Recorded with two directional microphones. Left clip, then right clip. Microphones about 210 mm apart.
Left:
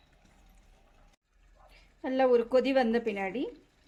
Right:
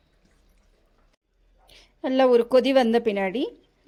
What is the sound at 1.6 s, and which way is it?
A woman's voice, 40° right (ahead or behind).